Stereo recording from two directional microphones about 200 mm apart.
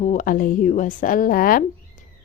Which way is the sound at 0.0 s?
40° left (ahead or behind).